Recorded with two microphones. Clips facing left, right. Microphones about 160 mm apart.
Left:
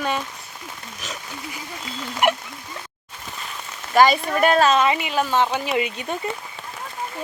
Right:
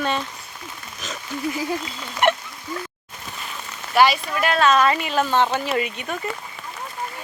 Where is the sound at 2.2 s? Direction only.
10° left (ahead or behind).